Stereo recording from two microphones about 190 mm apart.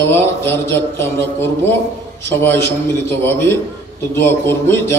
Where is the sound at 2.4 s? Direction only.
10° left (ahead or behind).